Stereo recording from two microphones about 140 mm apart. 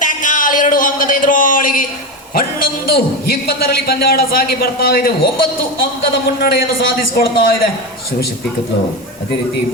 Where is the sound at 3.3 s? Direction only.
90° left.